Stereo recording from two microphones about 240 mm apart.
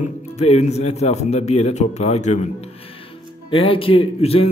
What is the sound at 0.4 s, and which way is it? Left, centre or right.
A man's voice, left.